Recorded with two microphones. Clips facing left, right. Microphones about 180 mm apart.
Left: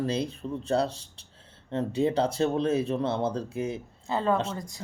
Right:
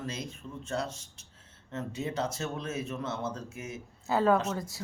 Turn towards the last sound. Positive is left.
turn(degrees=-5)  # may be behind; listen again after turning